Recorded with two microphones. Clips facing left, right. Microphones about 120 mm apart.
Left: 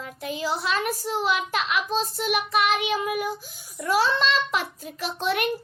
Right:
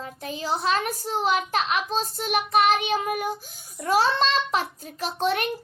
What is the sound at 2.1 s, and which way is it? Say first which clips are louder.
A child's voice: right 4 dB; 40° right (ahead or behind).